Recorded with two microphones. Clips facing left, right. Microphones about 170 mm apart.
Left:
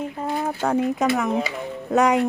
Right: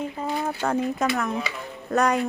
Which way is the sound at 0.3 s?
5° left (ahead or behind).